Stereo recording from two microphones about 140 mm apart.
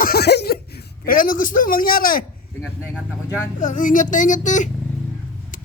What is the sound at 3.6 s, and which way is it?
Speech, 70° left (ahead or behind).